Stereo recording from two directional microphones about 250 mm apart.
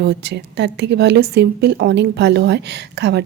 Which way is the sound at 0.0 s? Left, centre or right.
Right.